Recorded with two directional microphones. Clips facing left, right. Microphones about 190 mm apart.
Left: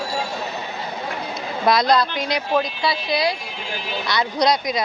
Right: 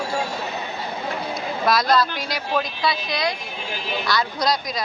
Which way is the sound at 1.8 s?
20° left (ahead or behind).